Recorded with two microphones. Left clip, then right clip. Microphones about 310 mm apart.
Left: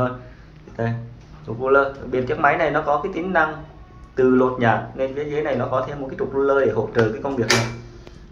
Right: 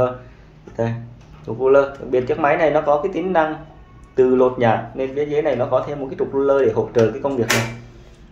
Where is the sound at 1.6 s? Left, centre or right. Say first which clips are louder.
Right 3 dB; right.